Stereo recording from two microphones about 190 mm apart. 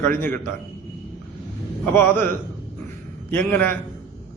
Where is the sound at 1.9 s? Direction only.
10° left (ahead or behind).